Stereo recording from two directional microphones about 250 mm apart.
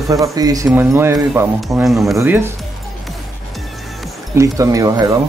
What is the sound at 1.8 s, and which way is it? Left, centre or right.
Speech, centre.